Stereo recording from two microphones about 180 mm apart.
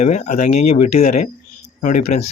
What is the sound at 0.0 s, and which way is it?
Speech, 40° left (ahead or behind).